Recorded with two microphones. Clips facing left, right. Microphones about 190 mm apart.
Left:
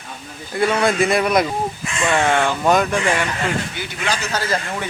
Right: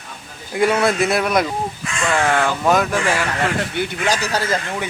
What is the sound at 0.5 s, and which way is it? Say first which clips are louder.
Speech: right 1 dB; 10° right (ahead or behind).